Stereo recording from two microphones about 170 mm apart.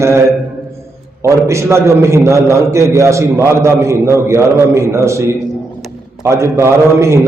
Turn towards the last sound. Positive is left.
turn(degrees=-15)  # may be behind; listen again after turning